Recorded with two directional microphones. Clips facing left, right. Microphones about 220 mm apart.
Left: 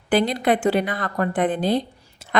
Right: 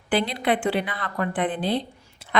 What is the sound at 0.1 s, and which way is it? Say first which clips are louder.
A woman's voice: left 4 dB; 45° left (ahead or behind).